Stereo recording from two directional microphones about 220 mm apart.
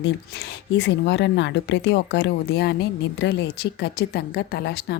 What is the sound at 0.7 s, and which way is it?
A woman's voice, 50° left (ahead or behind).